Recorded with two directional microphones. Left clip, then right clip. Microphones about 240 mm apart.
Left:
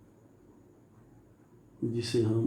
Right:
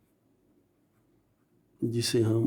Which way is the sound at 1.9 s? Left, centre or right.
Right.